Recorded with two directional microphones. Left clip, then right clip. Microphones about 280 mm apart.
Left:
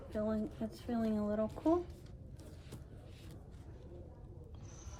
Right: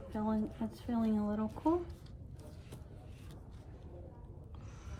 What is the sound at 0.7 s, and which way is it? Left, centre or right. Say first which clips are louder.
Speech: right 2 dB; centre.